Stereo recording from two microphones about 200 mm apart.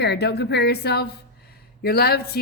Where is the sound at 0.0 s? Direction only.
55° left (ahead or behind).